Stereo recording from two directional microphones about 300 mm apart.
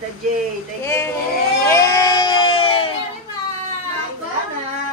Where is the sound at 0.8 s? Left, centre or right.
Centre.